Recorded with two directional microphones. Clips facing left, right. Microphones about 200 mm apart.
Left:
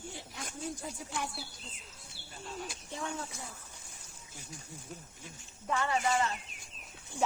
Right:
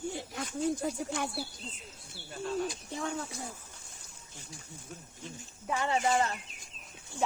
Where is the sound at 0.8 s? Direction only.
70° right (ahead or behind).